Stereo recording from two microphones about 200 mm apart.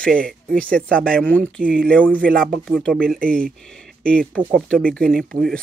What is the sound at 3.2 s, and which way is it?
Speech, 45° right (ahead or behind).